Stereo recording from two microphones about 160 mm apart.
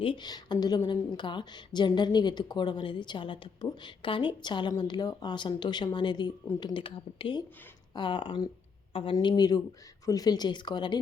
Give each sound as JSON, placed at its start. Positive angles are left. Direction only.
{"t": 0.0, "sound": "a woman's voice", "side_deg": 30}